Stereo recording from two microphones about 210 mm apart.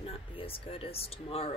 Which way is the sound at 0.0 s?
25° left (ahead or behind).